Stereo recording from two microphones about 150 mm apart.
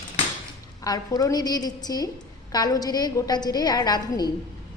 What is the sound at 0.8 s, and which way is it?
A woman's voice, 25° left (ahead or behind).